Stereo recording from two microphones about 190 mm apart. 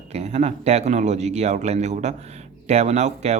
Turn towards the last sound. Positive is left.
turn(degrees=-35)  # may be behind; listen again after turning